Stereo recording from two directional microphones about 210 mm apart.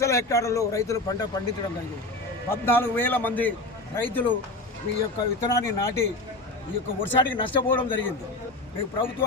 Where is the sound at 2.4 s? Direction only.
10° left (ahead or behind).